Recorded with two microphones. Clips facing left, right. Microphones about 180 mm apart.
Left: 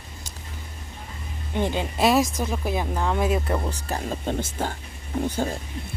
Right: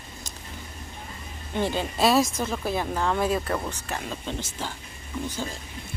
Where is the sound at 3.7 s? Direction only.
35° left (ahead or behind).